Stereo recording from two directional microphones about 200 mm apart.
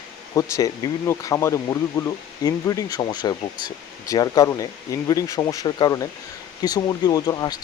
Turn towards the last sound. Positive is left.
turn(degrees=20)  # may be behind; listen again after turning